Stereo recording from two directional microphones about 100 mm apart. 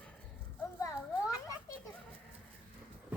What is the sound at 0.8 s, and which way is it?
Children playing, 30° left (ahead or behind).